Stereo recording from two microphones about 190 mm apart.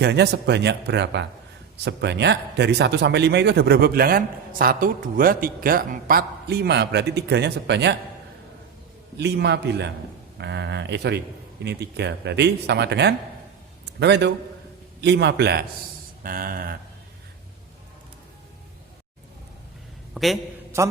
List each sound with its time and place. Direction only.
0.0 s a man's voice: 60° right (ahead or behind)
9.1 s a man's voice: 60° right (ahead or behind)
16.2 s speech: 50° right (ahead or behind)
20.1 s a man's voice: centre (ahead or behind)